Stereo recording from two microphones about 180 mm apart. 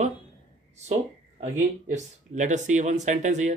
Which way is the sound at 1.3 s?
40° right (ahead or behind).